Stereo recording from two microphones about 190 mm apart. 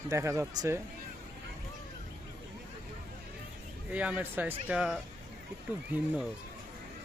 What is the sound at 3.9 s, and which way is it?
Speech, 5° right (ahead or behind).